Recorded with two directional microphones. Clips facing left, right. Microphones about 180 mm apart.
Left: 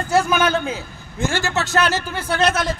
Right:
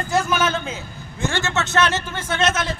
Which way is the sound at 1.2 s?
35° left (ahead or behind).